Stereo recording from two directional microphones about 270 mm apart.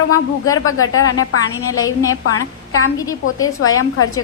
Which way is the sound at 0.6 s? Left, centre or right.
Left.